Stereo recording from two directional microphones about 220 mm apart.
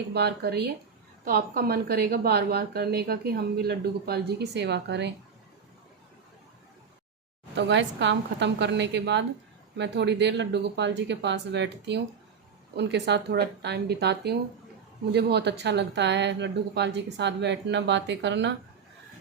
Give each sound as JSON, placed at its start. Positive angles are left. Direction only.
{"t": 0.1, "sound": "a woman's voice", "side_deg": -50}
{"t": 7.5, "sound": "a woman's voice", "side_deg": -50}